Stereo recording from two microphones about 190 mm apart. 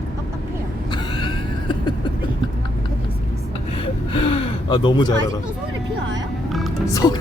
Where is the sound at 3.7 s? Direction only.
30° left (ahead or behind).